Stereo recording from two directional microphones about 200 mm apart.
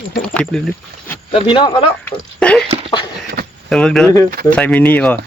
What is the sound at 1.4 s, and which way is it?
Speech, 25° left (ahead or behind).